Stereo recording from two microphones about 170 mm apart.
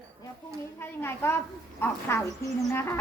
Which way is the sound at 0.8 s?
15° left (ahead or behind).